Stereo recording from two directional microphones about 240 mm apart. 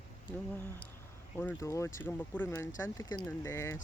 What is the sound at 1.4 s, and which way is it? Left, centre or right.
Speech, centre.